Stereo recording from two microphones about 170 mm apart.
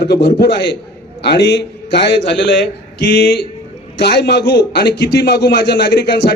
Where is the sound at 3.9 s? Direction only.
75° left (ahead or behind).